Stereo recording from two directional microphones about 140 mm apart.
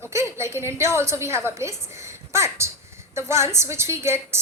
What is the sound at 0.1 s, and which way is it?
A woman's voice, 20° right (ahead or behind).